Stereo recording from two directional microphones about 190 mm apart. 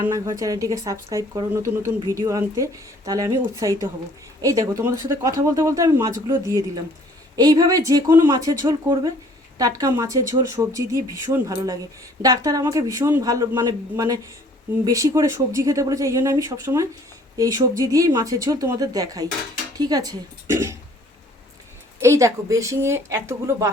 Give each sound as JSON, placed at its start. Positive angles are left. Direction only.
{"t": 0.1, "sound": "speech", "side_deg": -15}
{"t": 22.0, "sound": "speech", "side_deg": -15}